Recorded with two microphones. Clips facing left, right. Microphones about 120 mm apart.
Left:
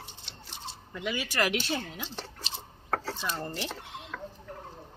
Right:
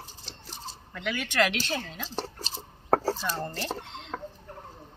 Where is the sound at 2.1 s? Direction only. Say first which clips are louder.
Right 5 dB; 40° right (ahead or behind).